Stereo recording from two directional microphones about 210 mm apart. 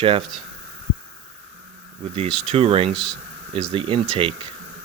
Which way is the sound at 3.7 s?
25° right (ahead or behind).